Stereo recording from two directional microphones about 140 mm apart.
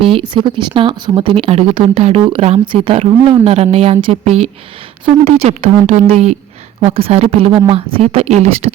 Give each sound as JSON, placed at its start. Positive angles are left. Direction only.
{"t": 0.0, "sound": "a woman's voice", "side_deg": -35}